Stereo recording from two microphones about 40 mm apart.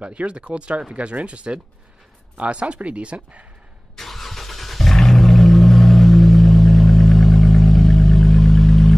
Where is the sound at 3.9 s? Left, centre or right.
Centre.